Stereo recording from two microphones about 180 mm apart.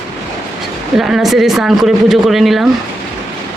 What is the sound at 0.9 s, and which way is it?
Speech, centre (ahead or behind).